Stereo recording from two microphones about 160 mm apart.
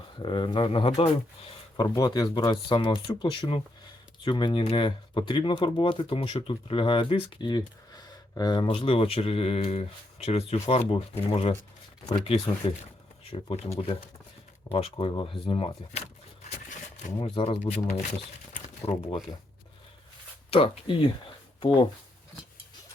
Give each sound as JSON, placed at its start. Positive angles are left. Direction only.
{"t": 0.2, "sound": "speech", "side_deg": 30}
{"t": 1.7, "sound": "speech", "side_deg": 25}
{"t": 16.5, "sound": "a sound", "side_deg": 50}
{"t": 17.2, "sound": "speech", "side_deg": 40}
{"t": 20.5, "sound": "speech", "side_deg": 35}